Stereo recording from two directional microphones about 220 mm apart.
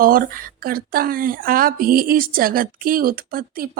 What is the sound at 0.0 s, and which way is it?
A woman's voice, 40° right (ahead or behind).